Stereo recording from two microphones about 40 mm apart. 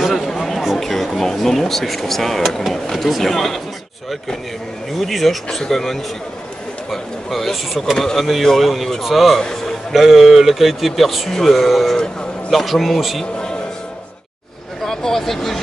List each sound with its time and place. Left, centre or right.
0.1 s a sound: centre
0.7 s speech: centre
4.9 s speech: centre
14.9 s speech: centre